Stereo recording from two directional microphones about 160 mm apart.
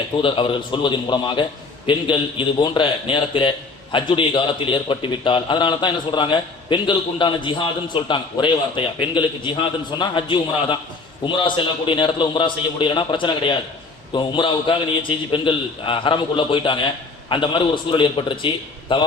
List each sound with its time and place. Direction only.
0.2 s a man's voice: 30° left (ahead or behind)